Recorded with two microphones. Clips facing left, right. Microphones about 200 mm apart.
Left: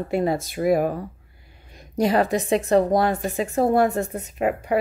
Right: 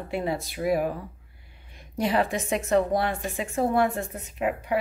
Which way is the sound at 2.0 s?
40° left (ahead or behind).